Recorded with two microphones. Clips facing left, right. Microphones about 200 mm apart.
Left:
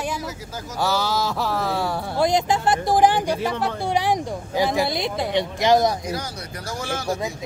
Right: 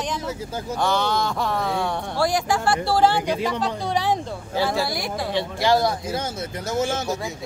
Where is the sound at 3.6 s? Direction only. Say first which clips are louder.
Left 1 dB; 15° left (ahead or behind).